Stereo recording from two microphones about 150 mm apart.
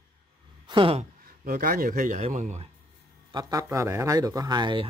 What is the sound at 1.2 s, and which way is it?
Speech, 75° right (ahead or behind).